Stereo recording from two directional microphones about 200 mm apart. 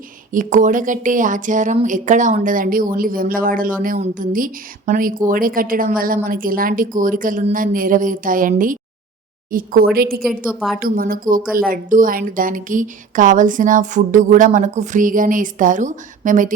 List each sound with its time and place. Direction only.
0.3 s a woman's voice: 40° right (ahead or behind)
10.2 s a woman's voice: centre (ahead or behind)
10.8 s a woman's voice: 45° right (ahead or behind)